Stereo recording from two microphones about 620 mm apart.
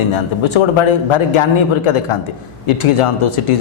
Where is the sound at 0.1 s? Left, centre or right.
Left.